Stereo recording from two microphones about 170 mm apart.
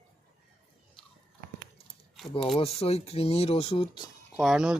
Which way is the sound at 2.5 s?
35° left (ahead or behind).